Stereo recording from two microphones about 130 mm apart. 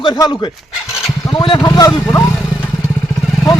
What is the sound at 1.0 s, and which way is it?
Vehicle, 25° left (ahead or behind).